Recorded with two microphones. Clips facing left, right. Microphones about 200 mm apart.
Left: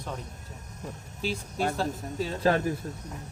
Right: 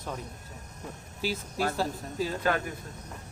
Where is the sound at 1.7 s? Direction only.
Centre (ahead or behind).